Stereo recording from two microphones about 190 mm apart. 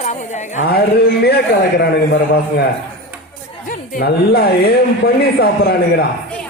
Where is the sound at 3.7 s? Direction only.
50° left (ahead or behind).